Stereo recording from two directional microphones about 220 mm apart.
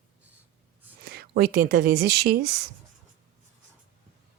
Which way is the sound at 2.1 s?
45° right (ahead or behind).